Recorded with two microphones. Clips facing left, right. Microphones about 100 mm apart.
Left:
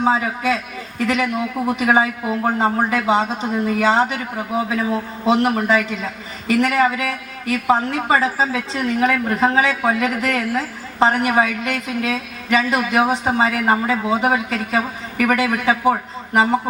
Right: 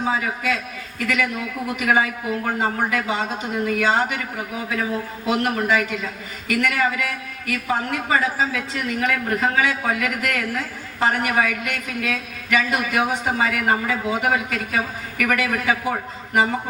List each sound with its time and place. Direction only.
0.0 s a woman's voice: 30° left (ahead or behind)
5.2 s a woman's voice: 30° left (ahead or behind)